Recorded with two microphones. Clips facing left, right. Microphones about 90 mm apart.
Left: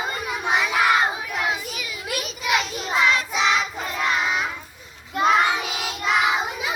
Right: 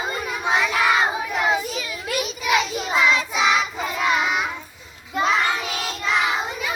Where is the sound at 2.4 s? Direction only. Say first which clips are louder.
Right 1 dB; centre (ahead or behind).